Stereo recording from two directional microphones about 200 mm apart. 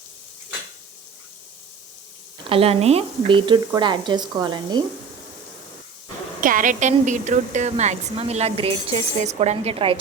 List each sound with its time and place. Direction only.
2.5 s speech: 30° right (ahead or behind)
6.4 s a woman's voice: 40° right (ahead or behind)